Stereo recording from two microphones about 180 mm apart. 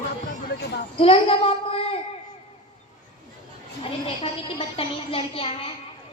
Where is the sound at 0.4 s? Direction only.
65° left (ahead or behind).